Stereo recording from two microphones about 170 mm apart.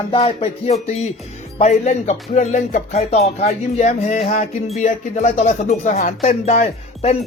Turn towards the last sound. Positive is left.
turn(degrees=40)  # may be behind; listen again after turning